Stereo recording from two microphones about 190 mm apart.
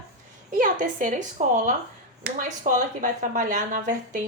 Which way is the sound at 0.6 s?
45° right (ahead or behind).